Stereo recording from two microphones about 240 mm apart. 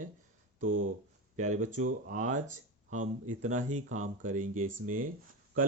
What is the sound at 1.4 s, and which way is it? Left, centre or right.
Speech, right.